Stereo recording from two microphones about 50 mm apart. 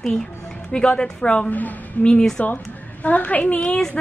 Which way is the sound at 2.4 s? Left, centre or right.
Left.